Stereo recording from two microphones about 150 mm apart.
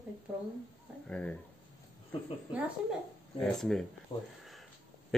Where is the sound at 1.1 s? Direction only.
10° left (ahead or behind).